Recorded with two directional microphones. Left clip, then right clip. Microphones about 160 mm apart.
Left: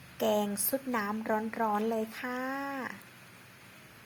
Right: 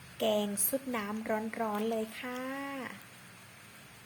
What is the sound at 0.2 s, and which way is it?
A woman's voice, 15° left (ahead or behind).